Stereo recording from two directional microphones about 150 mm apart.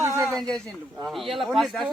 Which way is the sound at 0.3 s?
5° left (ahead or behind).